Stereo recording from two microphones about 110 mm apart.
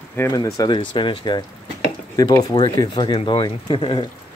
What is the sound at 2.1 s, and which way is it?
Speech, 35° left (ahead or behind).